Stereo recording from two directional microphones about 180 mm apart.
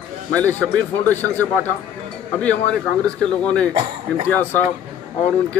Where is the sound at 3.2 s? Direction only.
5° left (ahead or behind).